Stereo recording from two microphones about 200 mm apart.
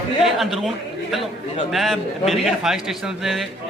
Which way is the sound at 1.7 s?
Centre (ahead or behind).